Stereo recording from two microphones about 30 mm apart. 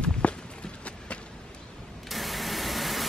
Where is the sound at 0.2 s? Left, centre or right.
Left.